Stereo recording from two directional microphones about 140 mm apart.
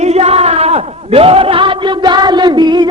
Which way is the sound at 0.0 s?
50° right (ahead or behind).